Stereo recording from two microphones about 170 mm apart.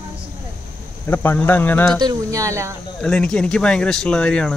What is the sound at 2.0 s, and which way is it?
Speech, 20° right (ahead or behind).